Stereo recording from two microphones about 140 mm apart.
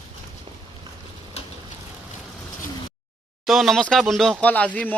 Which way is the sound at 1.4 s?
50° left (ahead or behind).